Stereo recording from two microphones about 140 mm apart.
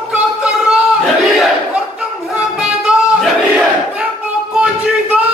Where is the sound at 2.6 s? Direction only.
5° right (ahead or behind).